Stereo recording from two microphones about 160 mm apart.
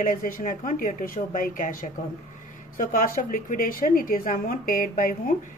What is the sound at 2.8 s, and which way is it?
Speech, 60° left (ahead or behind).